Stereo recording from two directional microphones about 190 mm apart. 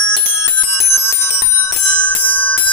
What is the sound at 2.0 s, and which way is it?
Music, 10° left (ahead or behind).